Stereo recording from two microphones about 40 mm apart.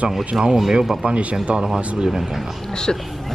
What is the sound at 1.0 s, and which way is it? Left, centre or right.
Speech, right.